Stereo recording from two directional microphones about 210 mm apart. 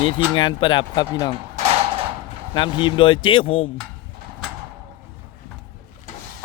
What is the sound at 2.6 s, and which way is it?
Speech, 25° left (ahead or behind).